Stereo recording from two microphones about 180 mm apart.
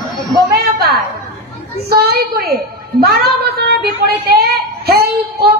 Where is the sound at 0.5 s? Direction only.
60° right (ahead or behind).